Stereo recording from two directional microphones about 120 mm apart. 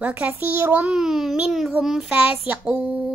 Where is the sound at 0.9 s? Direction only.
5° right (ahead or behind).